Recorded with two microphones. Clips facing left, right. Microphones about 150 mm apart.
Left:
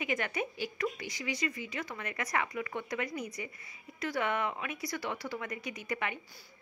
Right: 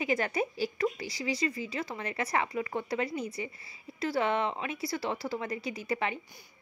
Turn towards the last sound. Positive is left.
turn(degrees=-30)  # may be behind; listen again after turning